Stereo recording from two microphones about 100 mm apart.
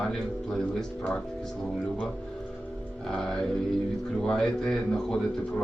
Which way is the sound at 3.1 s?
5° left (ahead or behind).